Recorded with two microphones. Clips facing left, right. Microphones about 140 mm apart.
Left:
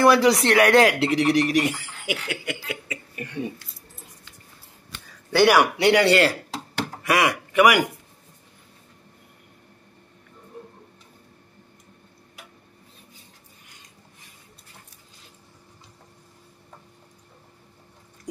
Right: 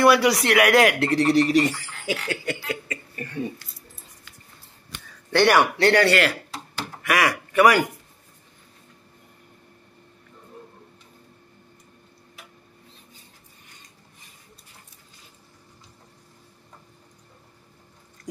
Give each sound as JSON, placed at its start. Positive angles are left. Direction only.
{"t": 0.1, "sound": "speech", "side_deg": 30}
{"t": 1.0, "sound": "speech", "side_deg": 15}
{"t": 5.3, "sound": "speech", "side_deg": 10}
{"t": 7.0, "sound": "a man's voice", "side_deg": 25}